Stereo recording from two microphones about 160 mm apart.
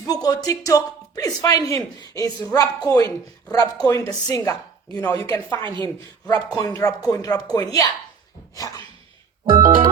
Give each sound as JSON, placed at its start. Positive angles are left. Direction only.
{"t": 0.0, "sound": "a woman's voice", "side_deg": 25}
{"t": 5.8, "sound": "speech", "side_deg": 25}
{"t": 9.5, "sound": "music", "side_deg": -30}